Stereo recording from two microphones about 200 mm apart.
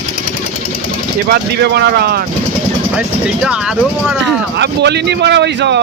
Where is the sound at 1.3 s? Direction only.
55° right (ahead or behind).